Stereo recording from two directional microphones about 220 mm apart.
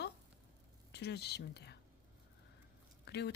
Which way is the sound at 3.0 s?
50° left (ahead or behind).